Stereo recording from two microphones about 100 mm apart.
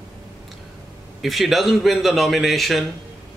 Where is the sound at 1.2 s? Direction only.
Centre (ahead or behind).